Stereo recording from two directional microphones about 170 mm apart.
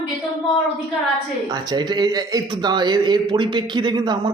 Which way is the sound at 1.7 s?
25° right (ahead or behind).